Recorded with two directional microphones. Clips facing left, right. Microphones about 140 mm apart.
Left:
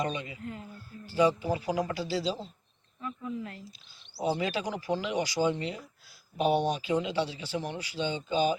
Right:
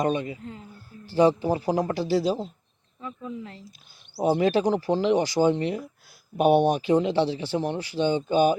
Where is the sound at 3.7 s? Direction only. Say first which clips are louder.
Right 9 dB; 50° right (ahead or behind).